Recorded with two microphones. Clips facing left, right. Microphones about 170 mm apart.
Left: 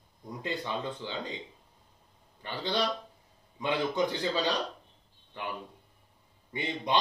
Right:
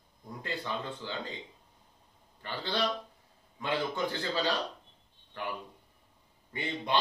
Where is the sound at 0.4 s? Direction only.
20° left (ahead or behind).